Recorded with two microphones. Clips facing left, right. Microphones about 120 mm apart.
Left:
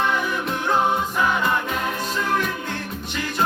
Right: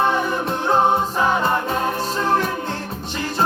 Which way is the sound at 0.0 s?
35° right (ahead or behind).